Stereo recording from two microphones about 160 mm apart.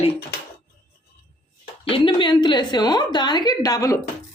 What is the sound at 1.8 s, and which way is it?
A woman's voice, 35° left (ahead or behind).